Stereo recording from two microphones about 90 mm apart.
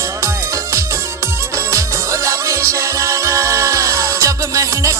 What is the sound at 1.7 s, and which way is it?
Music, 35° right (ahead or behind).